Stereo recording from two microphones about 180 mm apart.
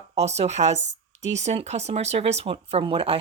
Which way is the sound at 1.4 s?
40° right (ahead or behind).